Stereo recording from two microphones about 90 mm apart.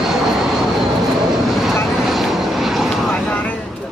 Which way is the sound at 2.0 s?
5° right (ahead or behind).